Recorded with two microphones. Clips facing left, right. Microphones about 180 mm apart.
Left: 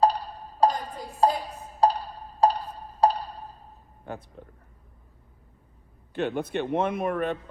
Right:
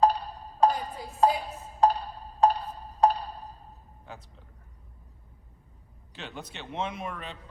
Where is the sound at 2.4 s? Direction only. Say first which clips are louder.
Left 1 dB; 35° left (ahead or behind).